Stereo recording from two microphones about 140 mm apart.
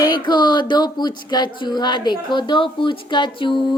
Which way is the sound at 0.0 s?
30° left (ahead or behind).